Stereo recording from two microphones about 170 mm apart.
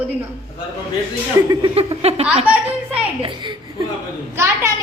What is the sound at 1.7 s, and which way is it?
Speech, 35° right (ahead or behind).